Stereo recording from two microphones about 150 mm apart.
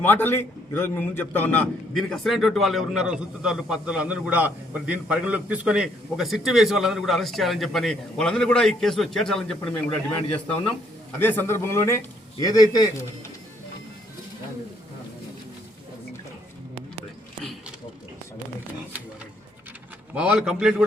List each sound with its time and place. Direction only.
0.0 s a man's voice: 15° left (ahead or behind)
11.2 s a man's voice: 15° left (ahead or behind)
20.1 s a man's voice: 5° right (ahead or behind)